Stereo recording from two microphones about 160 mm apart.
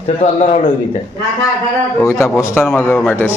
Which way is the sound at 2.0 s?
15° left (ahead or behind).